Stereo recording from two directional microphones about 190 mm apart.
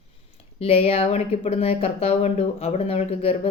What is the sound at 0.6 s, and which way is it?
Speech, 30° left (ahead or behind).